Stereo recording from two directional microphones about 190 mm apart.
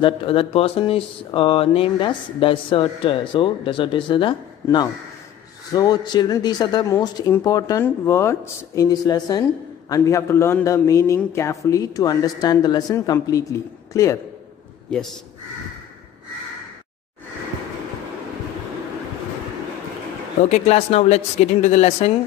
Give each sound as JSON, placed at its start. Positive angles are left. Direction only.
{"t": 0.0, "sound": "a man's voice", "side_deg": 30}
{"t": 14.9, "sound": "speech", "side_deg": 5}
{"t": 20.4, "sound": "speech", "side_deg": 35}